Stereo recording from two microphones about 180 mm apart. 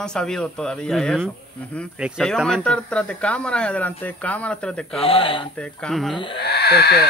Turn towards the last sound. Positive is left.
turn(degrees=60)  # may be behind; listen again after turning